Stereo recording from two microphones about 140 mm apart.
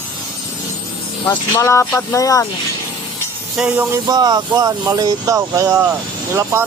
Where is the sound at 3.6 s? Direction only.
10° right (ahead or behind).